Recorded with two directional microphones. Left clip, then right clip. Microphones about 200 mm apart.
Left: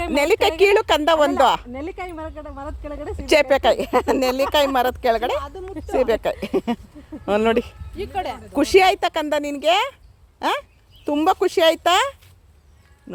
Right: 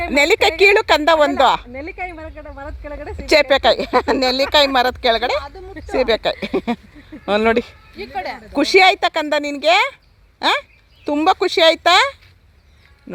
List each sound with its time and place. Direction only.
0.1 s speech: centre (ahead or behind)
1.7 s speech: 60° left (ahead or behind)
3.2 s speech: centre (ahead or behind)
5.4 s a woman's voice: 60° left (ahead or behind)
6.1 s speech: centre (ahead or behind)
7.9 s speech: 60° left (ahead or behind)
8.5 s speech: centre (ahead or behind)